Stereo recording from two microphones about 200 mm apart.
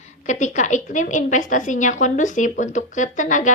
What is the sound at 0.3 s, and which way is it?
A woman's voice, 35° left (ahead or behind).